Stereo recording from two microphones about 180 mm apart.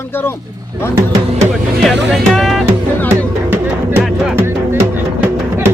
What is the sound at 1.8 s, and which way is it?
Speech, centre (ahead or behind).